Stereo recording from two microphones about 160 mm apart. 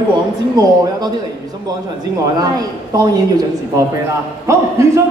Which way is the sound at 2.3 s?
20° right (ahead or behind).